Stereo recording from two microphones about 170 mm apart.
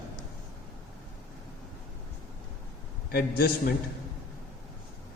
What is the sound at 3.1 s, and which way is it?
Speech, 65° left (ahead or behind).